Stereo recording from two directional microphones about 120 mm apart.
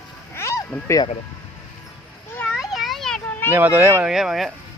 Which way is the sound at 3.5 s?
15° right (ahead or behind).